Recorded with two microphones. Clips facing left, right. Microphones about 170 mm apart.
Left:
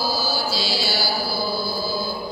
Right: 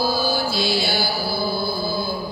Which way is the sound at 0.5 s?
55° right (ahead or behind).